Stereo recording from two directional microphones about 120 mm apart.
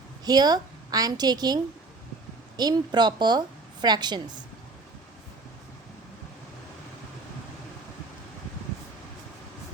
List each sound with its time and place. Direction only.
0.3 s a woman's voice: 35° right (ahead or behind)